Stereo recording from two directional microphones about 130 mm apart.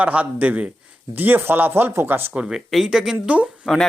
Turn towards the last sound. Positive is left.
turn(degrees=-10)  # may be behind; listen again after turning